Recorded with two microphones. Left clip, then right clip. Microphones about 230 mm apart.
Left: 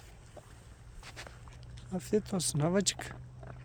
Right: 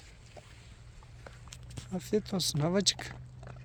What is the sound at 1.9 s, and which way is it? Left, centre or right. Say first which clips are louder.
Speech: even; centre.